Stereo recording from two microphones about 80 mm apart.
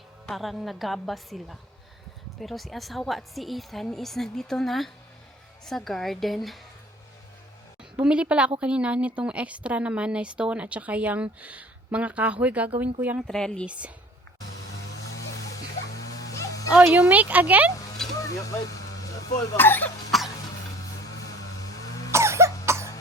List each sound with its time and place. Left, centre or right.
0.3 s a woman's voice: centre
7.9 s a woman's voice: centre
13.2 s speech: centre
13.7 s a woman's voice: centre
16.2 s music: left
16.8 s speech: right
18.2 s speech: left
19.5 s speech: left
20.1 s cough: centre
22.1 s cough: right